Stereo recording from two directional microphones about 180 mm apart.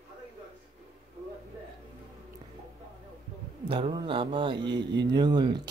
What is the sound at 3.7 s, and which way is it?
Mantra, 30° right (ahead or behind).